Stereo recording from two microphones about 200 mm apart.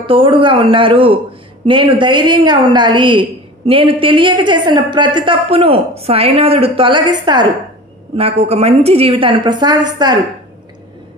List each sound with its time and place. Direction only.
0.0 s a woman's voice: 25° right (ahead or behind)